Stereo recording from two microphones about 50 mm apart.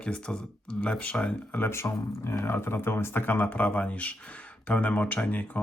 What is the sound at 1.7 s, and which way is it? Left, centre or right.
Speech, left.